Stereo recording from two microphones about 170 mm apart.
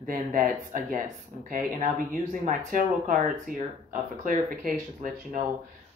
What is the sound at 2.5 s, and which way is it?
Speech, 50° right (ahead or behind).